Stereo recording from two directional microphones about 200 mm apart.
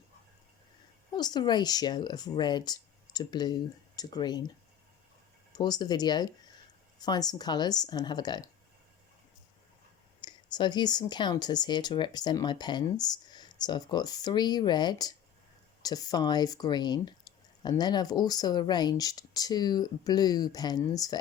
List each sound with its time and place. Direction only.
1.1 s speech: 20° left (ahead or behind)
5.5 s speech: 20° left (ahead or behind)
10.2 s speech: 20° left (ahead or behind)